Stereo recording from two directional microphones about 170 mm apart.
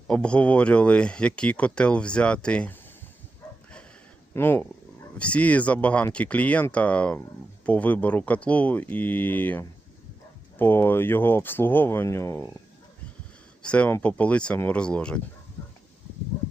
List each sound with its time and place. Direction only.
0.1 s speech: 5° left (ahead or behind)
4.4 s speech: 15° left (ahead or behind)
13.6 s speech: 5° left (ahead or behind)